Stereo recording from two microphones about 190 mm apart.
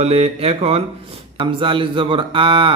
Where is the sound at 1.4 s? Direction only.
25° right (ahead or behind).